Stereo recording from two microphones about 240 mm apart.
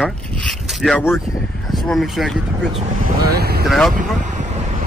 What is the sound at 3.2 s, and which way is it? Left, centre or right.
Speech, right.